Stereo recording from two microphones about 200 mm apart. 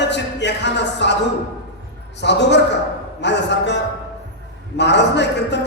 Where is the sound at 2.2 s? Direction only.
60° left (ahead or behind).